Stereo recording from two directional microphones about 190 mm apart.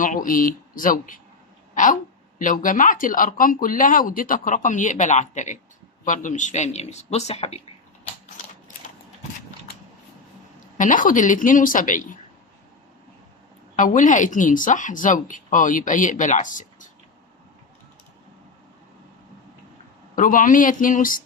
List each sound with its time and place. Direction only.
0.0 s speech: 45° left (ahead or behind)
1.7 s a sound: 45° left (ahead or behind)
2.4 s speech: 45° left (ahead or behind)
10.8 s speech: 45° left (ahead or behind)
13.7 s speech: 40° left (ahead or behind)
20.1 s speech: 45° left (ahead or behind)